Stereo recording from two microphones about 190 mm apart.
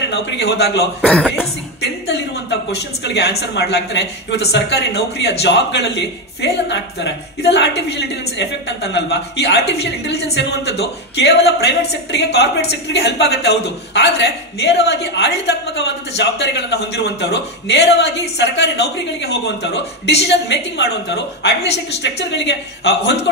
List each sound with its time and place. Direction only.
0.1 s a woman's voice: 60° left (ahead or behind)
1.0 s speech: 5° left (ahead or behind)
2.7 s a woman's voice: 60° left (ahead or behind)